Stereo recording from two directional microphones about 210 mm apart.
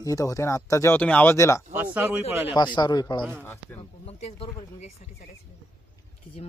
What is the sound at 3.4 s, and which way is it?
Speech, 10° left (ahead or behind).